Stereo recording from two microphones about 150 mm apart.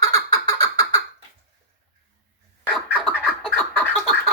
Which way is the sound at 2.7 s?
10° left (ahead or behind).